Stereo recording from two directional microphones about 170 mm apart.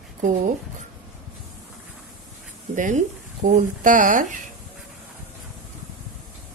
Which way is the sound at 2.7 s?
50° right (ahead or behind).